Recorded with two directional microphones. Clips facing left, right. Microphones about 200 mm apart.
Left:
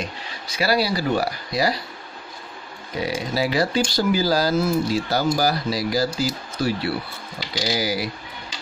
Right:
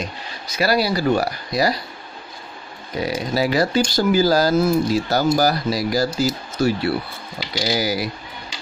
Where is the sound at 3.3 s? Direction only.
45° right (ahead or behind).